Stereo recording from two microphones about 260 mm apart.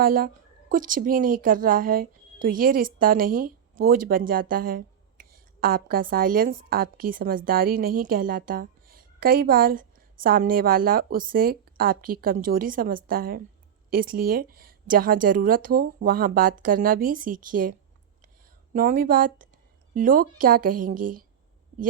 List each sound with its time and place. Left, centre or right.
0.0 s a woman's voice: right